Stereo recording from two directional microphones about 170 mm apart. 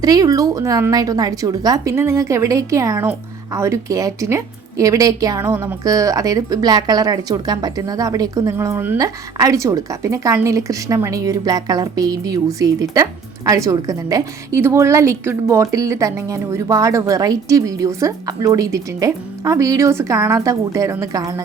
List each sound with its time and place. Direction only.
0.0 s a woman's voice: 20° right (ahead or behind)